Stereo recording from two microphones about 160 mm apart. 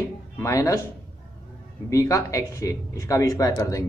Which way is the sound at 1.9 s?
20° left (ahead or behind).